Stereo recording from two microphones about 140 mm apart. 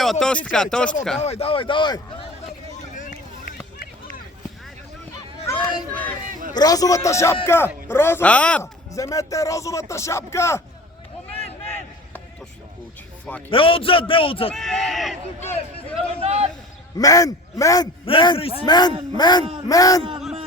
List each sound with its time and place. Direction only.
0.0 s speech: 5° left (ahead or behind)
1.2 s speech: 45° left (ahead or behind)
2.7 s a sound: 60° left (ahead or behind)
5.9 s speech: 10° left (ahead or behind)
6.5 s speech: 30° left (ahead or behind); by 8.6 s 10° left (ahead or behind)
8.6 s speech: 20° left (ahead or behind)
11.3 s a sound: 15° left (ahead or behind)
13.5 s speech: 40° left (ahead or behind)
14.5 s speech: centre (ahead or behind)
16.0 s speech: 45° right (ahead or behind)
17.0 s speech: 25° left (ahead or behind)
18.0 s speech: 35° left (ahead or behind)